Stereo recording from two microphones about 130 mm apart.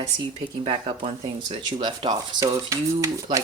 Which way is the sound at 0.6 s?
50° right (ahead or behind).